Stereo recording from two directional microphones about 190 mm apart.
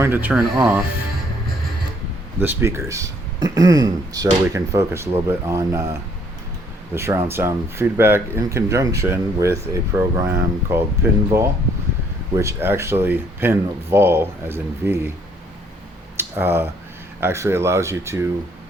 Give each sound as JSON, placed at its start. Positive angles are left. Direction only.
{"t": 0.0, "sound": "speech", "side_deg": -10}
{"t": 2.4, "sound": "speech", "side_deg": -10}
{"t": 16.1, "sound": "a sound", "side_deg": -10}
{"t": 17.2, "sound": "speech", "side_deg": -15}